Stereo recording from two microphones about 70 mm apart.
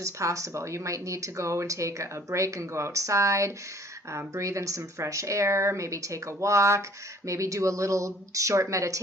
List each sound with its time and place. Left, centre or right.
0.0 s speech: right